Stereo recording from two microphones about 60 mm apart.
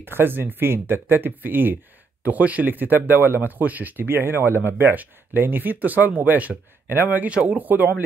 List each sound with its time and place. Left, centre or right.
0.0 s speech: right